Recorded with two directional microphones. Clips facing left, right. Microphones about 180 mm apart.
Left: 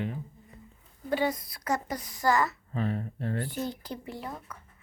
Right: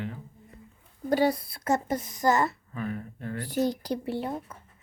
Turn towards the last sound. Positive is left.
turn(degrees=-25)  # may be behind; listen again after turning